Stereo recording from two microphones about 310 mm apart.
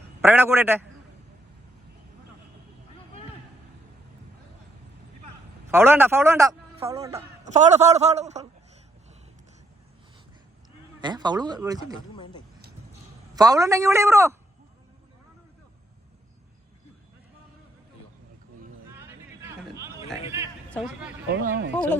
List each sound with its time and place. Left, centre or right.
0.2 s a man's voice: centre
5.7 s a man's voice: centre
7.4 s a man's voice: right
11.0 s a man's voice: centre
11.9 s speech: centre
13.3 s a man's voice: centre
18.9 s a sound: centre
20.7 s a man's voice: centre
21.3 s speech: right